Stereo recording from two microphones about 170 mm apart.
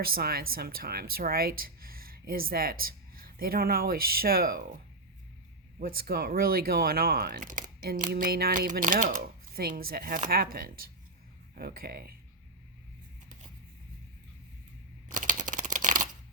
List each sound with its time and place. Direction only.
0.0 s speech: 60° right (ahead or behind)
5.8 s speech: 60° right (ahead or behind)
8.7 s speech: 50° right (ahead or behind)
15.1 s a sound: 50° right (ahead or behind)